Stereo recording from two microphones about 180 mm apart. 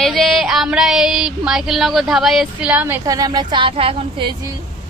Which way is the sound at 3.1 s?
20° right (ahead or behind).